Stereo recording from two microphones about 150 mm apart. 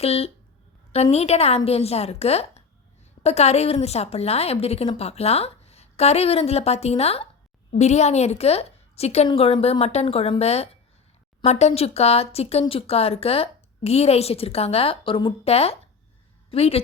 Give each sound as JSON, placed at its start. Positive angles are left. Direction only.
{"t": 0.0, "sound": "a woman's voice", "side_deg": 40}